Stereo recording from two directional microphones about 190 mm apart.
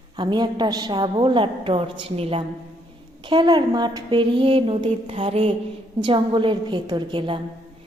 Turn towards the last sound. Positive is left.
turn(degrees=-25)  # may be behind; listen again after turning